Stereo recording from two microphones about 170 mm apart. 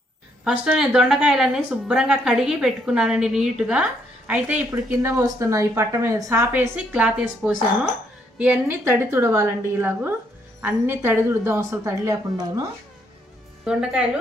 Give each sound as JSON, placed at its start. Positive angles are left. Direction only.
{"t": 0.4, "sound": "a woman's voice", "side_deg": -5}
{"t": 4.7, "sound": "a woman's voice", "side_deg": -20}
{"t": 13.7, "sound": "a woman's voice", "side_deg": -5}